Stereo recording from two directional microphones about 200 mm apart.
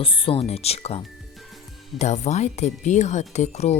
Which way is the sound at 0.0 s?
25° left (ahead or behind).